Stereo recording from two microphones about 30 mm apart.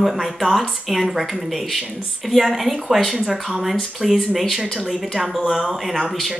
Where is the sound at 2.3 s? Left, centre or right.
Centre.